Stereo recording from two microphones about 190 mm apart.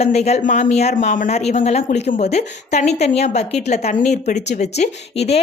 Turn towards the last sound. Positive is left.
turn(degrees=35)  # may be behind; listen again after turning